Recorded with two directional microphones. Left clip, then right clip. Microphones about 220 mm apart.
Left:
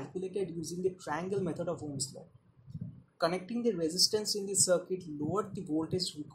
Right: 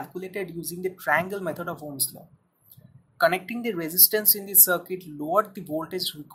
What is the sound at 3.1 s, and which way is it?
Speech, 20° right (ahead or behind).